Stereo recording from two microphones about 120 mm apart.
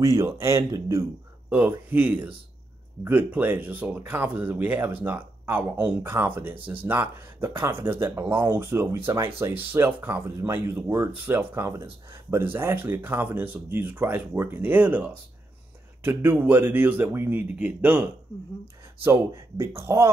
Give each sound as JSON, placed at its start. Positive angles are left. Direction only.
{"t": 0.0, "sound": "speech", "side_deg": -25}
{"t": 19.0, "sound": "speech", "side_deg": -20}